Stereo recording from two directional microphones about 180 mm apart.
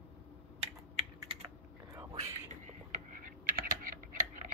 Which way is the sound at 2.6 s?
45° right (ahead or behind).